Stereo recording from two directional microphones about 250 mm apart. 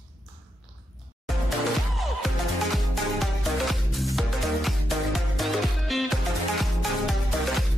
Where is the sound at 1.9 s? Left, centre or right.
Centre.